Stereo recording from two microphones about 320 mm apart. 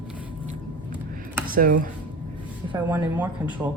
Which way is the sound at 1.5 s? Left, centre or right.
Right.